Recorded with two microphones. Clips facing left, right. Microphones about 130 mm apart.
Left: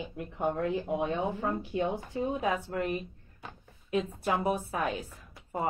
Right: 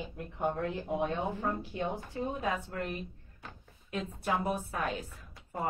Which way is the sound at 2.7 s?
5° left (ahead or behind).